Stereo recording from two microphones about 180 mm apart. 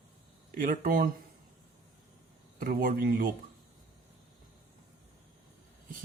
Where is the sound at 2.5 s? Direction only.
50° right (ahead or behind).